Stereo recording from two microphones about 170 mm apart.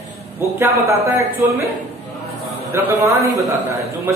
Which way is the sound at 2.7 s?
10° right (ahead or behind).